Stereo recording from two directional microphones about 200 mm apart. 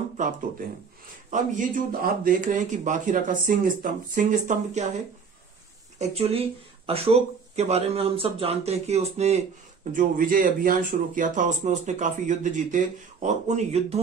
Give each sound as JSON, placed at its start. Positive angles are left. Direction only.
{"t": 1.3, "sound": "speech", "side_deg": -40}
{"t": 5.9, "sound": "speech", "side_deg": -30}